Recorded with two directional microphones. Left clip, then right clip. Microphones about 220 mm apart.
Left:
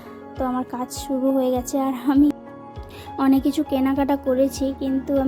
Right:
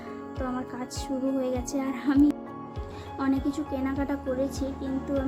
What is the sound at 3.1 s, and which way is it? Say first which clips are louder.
Speech: left 9 dB; 35° left (ahead or behind).